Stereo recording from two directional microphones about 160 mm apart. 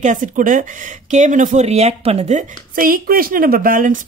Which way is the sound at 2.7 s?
60° right (ahead or behind).